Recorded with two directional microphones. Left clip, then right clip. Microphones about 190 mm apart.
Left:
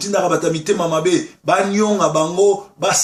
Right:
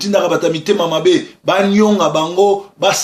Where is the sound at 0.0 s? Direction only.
30° right (ahead or behind).